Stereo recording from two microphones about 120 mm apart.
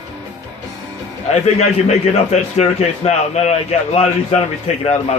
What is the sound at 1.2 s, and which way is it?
A man's voice, 65° left (ahead or behind).